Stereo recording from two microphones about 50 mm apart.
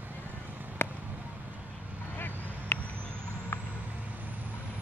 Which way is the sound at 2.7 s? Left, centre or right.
Left.